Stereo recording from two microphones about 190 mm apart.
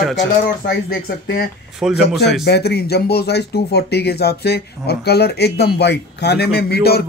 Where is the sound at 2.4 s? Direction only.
60° left (ahead or behind).